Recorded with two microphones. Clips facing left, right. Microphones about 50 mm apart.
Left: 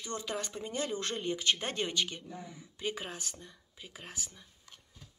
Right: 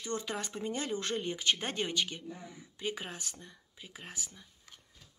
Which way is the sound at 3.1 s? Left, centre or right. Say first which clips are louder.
Left 1 dB; centre.